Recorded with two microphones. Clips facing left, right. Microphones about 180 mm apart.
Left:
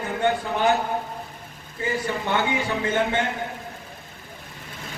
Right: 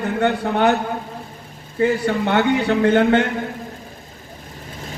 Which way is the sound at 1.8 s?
65° right (ahead or behind).